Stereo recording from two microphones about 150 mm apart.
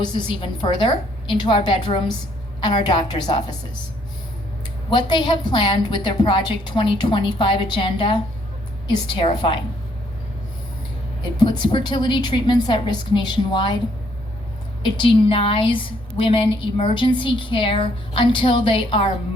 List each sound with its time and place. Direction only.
0.0 s a woman's voice: 30° left (ahead or behind)
4.9 s a woman's voice: 30° left (ahead or behind)
11.3 s a woman's voice: 30° left (ahead or behind)
14.8 s a woman's voice: 35° left (ahead or behind)